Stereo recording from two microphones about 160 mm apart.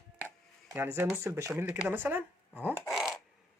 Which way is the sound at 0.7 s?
15° right (ahead or behind).